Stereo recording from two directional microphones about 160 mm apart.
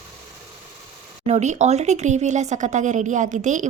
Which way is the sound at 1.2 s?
45° right (ahead or behind).